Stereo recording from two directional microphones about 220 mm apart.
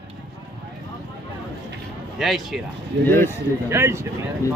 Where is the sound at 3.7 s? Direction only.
10° right (ahead or behind).